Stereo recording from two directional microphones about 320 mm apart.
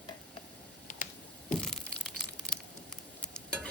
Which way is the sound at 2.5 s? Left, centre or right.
Centre.